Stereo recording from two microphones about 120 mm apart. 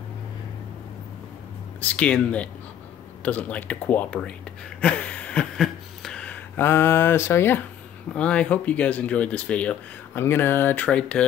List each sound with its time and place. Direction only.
1.8 s speech: 10° left (ahead or behind)
4.6 s a sound: 10° left (ahead or behind)
8.1 s speech: 10° left (ahead or behind)
10.1 s speech: 20° left (ahead or behind)